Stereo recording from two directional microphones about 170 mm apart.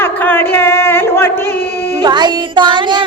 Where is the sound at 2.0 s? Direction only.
25° right (ahead or behind).